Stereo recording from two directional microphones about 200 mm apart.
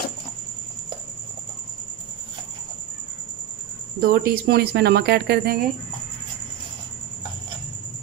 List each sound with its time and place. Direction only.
4.0 s speech: 45° right (ahead or behind)